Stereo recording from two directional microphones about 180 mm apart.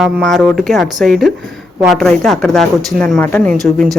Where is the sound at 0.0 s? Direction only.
Centre (ahead or behind).